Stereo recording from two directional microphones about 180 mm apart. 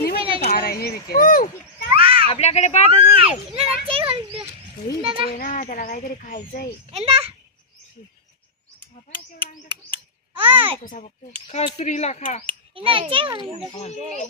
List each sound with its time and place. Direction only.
0.0 s a sound: 60° left (ahead or behind)
2.0 s children playing: 30° right (ahead or behind)
2.3 s speech: 35° left (ahead or behind)
3.2 s a child's voice: 30° right (ahead or behind)
5.2 s a child's voice: 50° left (ahead or behind)
6.9 s a child's voice: 30° right (ahead or behind)
9.6 s babbling: 25° right (ahead or behind)
11.5 s speech: 35° left (ahead or behind)
12.5 s a child's voice: 30° right (ahead or behind)
13.4 s speech: 35° left (ahead or behind)